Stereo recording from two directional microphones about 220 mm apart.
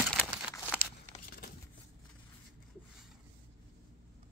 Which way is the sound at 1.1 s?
40° left (ahead or behind).